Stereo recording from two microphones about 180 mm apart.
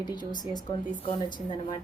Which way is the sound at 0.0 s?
25° left (ahead or behind).